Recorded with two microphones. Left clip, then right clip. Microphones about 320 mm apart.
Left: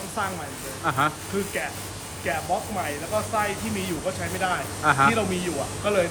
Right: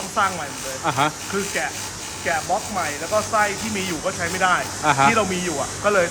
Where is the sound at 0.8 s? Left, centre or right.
Centre.